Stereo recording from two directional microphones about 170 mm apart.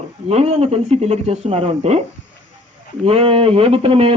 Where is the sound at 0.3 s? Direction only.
40° right (ahead or behind).